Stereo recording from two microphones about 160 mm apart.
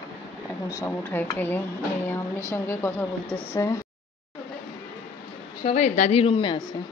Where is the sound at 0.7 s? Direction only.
15° left (ahead or behind).